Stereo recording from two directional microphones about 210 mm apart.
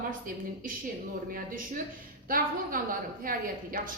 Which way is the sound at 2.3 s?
40° right (ahead or behind).